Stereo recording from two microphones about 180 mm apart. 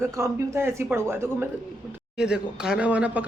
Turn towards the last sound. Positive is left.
turn(degrees=-10)  # may be behind; listen again after turning